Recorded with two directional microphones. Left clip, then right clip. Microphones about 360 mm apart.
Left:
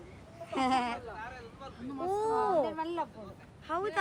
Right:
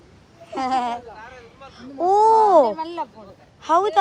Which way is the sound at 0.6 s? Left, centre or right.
Centre.